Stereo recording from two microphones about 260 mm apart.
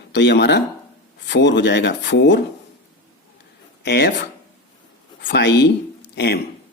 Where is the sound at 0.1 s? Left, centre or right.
Left.